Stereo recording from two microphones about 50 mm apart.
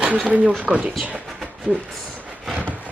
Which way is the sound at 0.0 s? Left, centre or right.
Right.